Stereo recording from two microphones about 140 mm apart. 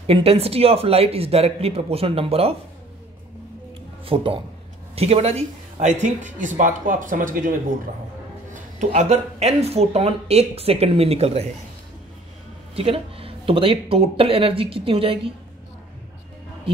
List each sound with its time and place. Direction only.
0.0 s speech: 45° right (ahead or behind)
4.0 s speech: 40° right (ahead or behind); by 7.5 s 75° right (ahead or behind)
8.5 s speech: 60° right (ahead or behind)
12.7 s speech: 45° right (ahead or behind)